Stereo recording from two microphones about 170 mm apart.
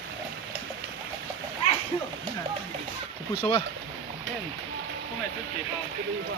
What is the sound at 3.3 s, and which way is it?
Speech, 30° left (ahead or behind).